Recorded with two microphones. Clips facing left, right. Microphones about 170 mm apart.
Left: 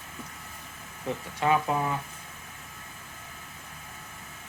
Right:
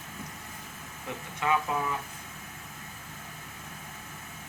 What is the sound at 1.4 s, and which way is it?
Speech, 30° left (ahead or behind).